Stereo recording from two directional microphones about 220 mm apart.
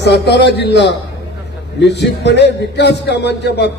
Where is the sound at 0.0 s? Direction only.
50° left (ahead or behind).